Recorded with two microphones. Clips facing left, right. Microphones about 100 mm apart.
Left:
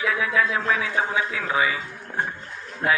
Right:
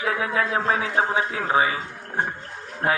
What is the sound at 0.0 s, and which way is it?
Speech, 40° right (ahead or behind).